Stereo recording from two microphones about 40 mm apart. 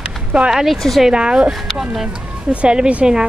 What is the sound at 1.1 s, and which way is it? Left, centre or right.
Speech, right.